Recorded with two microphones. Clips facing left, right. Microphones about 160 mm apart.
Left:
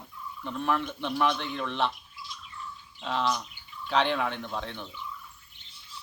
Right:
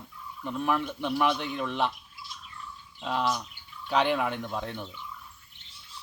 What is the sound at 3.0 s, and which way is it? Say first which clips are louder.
Speech: even; 5° right (ahead or behind).